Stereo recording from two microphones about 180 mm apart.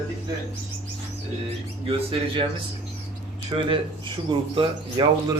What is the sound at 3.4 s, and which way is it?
Speech, 30° right (ahead or behind).